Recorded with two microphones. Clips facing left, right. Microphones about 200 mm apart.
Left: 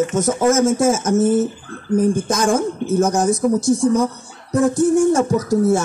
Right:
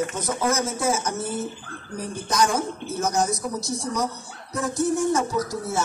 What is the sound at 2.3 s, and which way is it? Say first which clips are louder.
Speech: left 6 dB; 50° left (ahead or behind).